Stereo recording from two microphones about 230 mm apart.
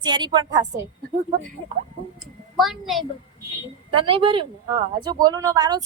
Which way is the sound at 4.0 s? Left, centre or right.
Right.